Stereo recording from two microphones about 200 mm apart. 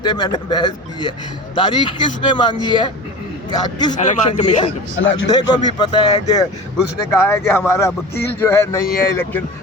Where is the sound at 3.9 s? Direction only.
35° left (ahead or behind).